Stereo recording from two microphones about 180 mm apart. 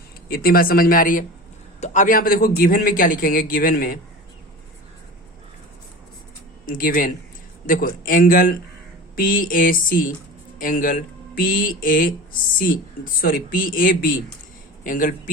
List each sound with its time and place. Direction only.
0.3 s a man's voice: 55° left (ahead or behind)
6.7 s a man's voice: 50° left (ahead or behind)